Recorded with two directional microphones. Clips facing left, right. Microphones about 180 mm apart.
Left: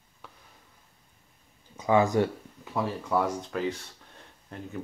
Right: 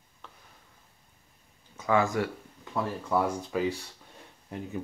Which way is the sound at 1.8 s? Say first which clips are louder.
Left 3 dB; 20° left (ahead or behind).